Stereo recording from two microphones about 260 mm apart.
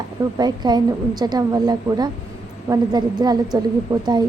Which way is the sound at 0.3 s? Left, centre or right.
Centre.